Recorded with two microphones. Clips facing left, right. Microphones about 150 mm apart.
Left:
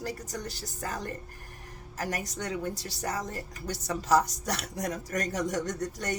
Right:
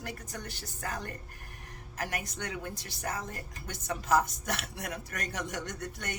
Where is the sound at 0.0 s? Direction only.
35° left (ahead or behind).